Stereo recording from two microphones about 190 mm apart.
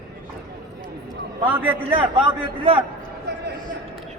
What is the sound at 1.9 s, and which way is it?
Speech, 30° right (ahead or behind).